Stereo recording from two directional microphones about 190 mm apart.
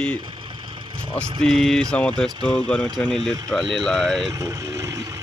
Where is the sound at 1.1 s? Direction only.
Centre (ahead or behind).